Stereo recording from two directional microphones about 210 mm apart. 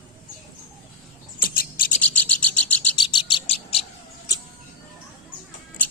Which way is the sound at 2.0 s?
5° left (ahead or behind).